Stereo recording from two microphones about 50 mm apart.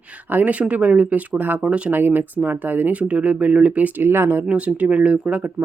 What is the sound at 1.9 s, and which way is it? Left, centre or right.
Speech, right.